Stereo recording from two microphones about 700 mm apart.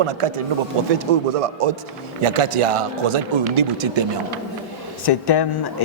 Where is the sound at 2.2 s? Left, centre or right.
Right.